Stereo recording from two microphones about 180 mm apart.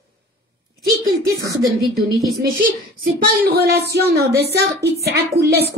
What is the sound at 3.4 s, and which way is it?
A woman's voice, 65° right (ahead or behind).